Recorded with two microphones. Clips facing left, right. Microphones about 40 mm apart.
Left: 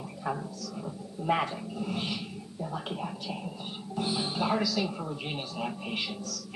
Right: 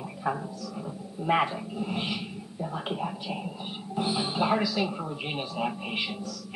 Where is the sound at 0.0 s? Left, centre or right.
Right.